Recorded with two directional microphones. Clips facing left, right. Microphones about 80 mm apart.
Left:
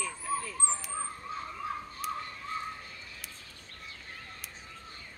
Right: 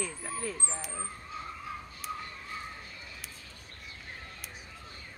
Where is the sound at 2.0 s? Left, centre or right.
Centre.